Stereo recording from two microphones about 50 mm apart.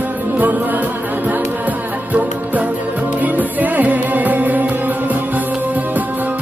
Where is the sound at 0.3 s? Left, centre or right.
Right.